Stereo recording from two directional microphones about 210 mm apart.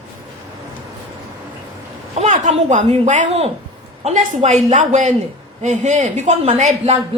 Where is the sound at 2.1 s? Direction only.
35° right (ahead or behind).